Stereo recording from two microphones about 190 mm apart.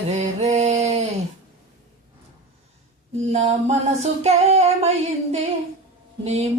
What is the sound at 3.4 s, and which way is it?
Mantra, 35° right (ahead or behind).